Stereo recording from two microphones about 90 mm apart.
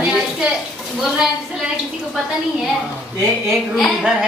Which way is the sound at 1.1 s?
5° right (ahead or behind).